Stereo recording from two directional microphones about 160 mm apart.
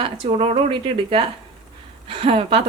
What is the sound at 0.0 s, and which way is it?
A woman's voice, 35° right (ahead or behind).